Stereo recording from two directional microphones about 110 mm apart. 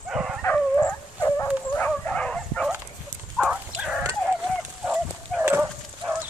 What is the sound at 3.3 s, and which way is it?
Livestock, 10° right (ahead or behind).